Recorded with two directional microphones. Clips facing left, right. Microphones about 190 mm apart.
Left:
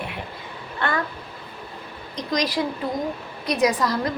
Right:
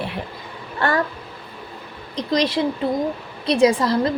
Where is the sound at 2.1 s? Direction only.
30° right (ahead or behind).